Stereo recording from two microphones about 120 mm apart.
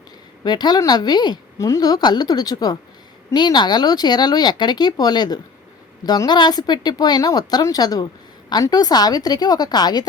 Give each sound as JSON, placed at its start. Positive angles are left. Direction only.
{"t": 0.4, "sound": "a woman's voice", "side_deg": 35}